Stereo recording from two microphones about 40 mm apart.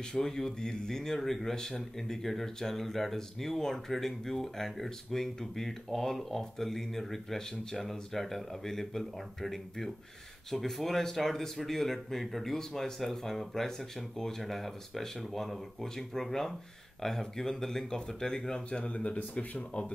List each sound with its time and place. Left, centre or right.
0.1 s speech: centre
18.9 s speech: left